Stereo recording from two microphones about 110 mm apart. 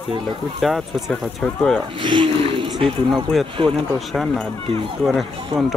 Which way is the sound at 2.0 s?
50° right (ahead or behind).